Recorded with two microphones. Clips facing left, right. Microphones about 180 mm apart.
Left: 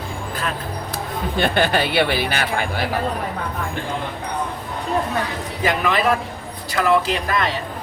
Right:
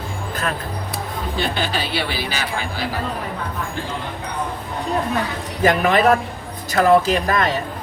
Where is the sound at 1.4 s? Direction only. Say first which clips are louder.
Left 5 dB; 55° left (ahead or behind).